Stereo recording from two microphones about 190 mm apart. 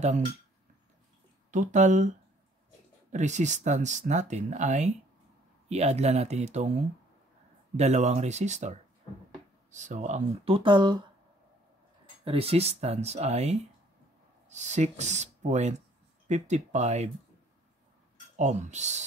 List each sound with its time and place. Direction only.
1.5 s speech: 40° right (ahead or behind); by 11.1 s 25° right (ahead or behind)
12.3 s speech: 30° right (ahead or behind)
18.3 s speech: 40° right (ahead or behind)